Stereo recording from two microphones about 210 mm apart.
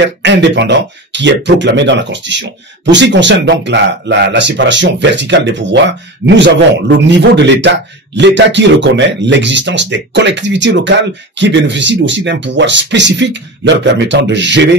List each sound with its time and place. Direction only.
0.0 s speech: 60° right (ahead or behind)